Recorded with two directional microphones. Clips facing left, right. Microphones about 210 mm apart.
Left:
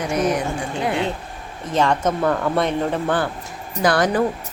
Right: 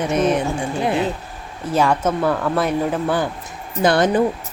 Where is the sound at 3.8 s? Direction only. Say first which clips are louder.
Right 2 dB; 25° right (ahead or behind).